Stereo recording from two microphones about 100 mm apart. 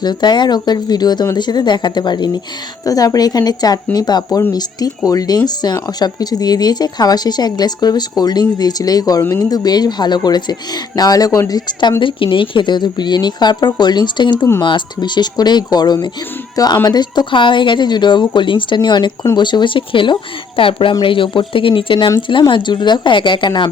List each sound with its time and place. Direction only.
0.0 s speech: 45° left (ahead or behind)
2.8 s a woman's voice: 35° left (ahead or behind); by 23.6 s 55° left (ahead or behind)